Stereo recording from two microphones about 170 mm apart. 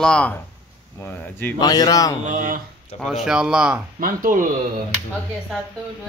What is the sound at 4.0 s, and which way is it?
Speech, 55° right (ahead or behind).